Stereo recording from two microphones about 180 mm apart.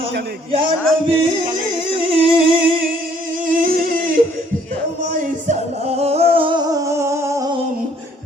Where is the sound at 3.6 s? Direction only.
50° right (ahead or behind).